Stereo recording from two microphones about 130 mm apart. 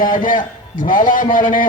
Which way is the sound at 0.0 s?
90° left.